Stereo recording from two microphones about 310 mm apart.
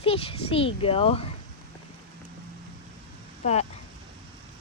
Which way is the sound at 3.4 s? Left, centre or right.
Left.